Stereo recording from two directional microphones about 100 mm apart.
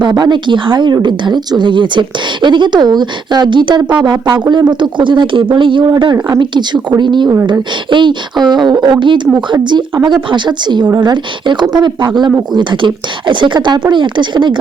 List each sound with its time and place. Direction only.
0.0 s a woman's voice: 50° right (ahead or behind)